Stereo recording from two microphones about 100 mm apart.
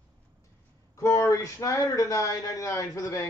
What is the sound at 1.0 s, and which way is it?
Speech, 30° left (ahead or behind).